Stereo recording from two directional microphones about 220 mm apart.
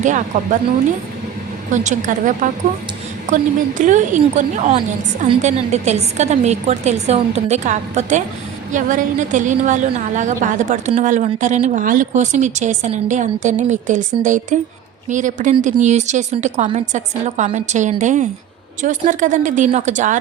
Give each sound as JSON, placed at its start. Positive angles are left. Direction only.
{"t": 0.0, "sound": "a woman's voice", "side_deg": -35}
{"t": 1.7, "sound": "a woman's voice", "side_deg": -35}